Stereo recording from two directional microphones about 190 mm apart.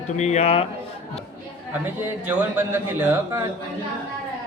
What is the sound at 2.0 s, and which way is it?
A woman's voice, 10° right (ahead or behind).